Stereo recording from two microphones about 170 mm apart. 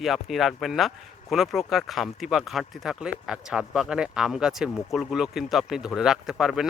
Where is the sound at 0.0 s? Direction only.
Centre (ahead or behind).